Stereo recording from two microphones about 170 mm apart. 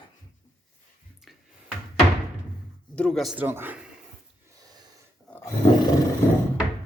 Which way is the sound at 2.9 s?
5° left (ahead or behind).